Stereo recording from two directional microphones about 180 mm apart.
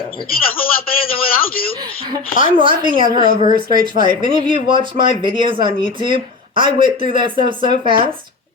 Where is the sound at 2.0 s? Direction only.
25° right (ahead or behind).